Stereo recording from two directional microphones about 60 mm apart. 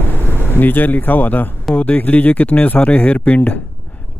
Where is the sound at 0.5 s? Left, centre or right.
Left.